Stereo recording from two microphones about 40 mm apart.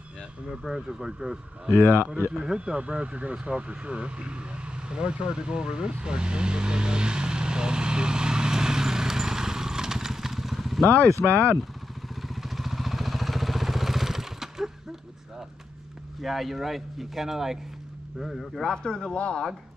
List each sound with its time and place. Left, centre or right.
0.7 s speech: centre
1.8 s speech: left
2.5 s speech: right
3.4 s vehicle: right; by 10.8 s centre
10.8 s speech: left
12.2 s vehicle: centre
16.2 s speech: centre
18.4 s speech: centre
18.7 s speech: centre